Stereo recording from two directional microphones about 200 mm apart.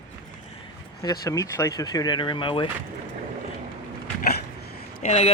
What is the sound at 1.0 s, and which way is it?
Speech, 15° left (ahead or behind).